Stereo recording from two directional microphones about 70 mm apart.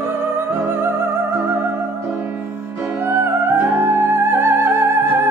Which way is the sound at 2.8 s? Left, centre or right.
Right.